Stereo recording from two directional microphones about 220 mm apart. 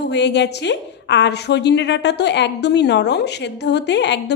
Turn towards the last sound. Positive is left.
turn(degrees=50)  # may be behind; listen again after turning